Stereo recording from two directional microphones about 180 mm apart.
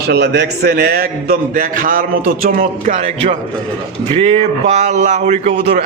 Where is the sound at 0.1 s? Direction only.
65° right (ahead or behind).